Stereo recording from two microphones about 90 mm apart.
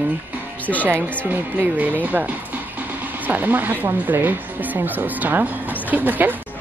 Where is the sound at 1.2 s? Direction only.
20° right (ahead or behind).